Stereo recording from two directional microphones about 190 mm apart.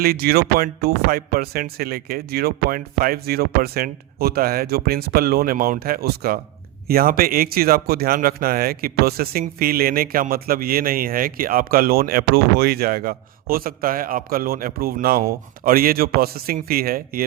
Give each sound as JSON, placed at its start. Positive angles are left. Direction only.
{"t": 0.0, "sound": "speech", "side_deg": -55}